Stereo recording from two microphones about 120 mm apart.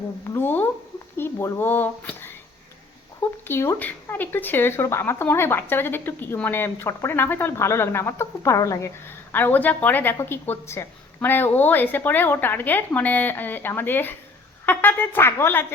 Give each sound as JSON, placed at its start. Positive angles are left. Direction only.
{"t": 0.3, "sound": "speech", "side_deg": 20}
{"t": 3.4, "sound": "speech", "side_deg": 20}